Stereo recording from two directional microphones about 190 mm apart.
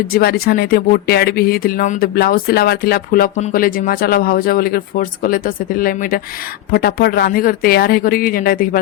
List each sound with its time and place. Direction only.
0.1 s speech: 55° left (ahead or behind)